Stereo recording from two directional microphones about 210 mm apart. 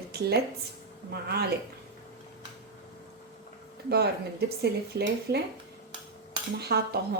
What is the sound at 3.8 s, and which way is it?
Speech, 50° right (ahead or behind).